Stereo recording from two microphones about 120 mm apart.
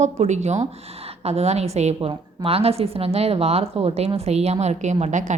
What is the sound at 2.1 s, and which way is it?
A woman's voice, 55° right (ahead or behind).